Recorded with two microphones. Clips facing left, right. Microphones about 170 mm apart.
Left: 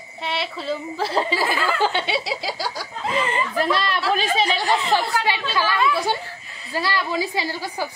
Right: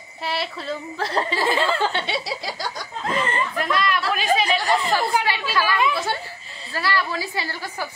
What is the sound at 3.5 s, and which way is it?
Speech, 30° left (ahead or behind).